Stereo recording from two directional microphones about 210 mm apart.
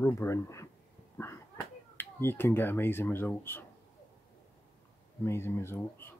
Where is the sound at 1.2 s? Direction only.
10° left (ahead or behind).